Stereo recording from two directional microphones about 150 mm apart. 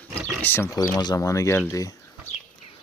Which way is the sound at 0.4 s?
15° left (ahead or behind).